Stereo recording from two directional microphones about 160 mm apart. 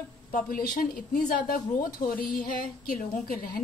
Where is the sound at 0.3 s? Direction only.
60° left (ahead or behind).